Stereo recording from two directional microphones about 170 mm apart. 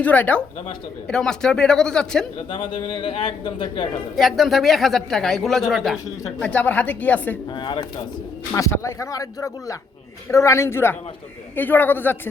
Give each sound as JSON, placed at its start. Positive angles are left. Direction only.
{"t": 0.0, "sound": "a woman's voice", "side_deg": 10}
{"t": 2.5, "sound": "speech", "side_deg": 30}
{"t": 4.1, "sound": "a woman's voice", "side_deg": 0}
{"t": 7.5, "sound": "speech", "side_deg": 30}
{"t": 8.5, "sound": "a woman's voice", "side_deg": 20}